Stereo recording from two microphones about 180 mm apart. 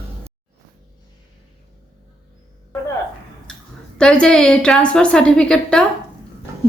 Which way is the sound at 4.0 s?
5° left (ahead or behind).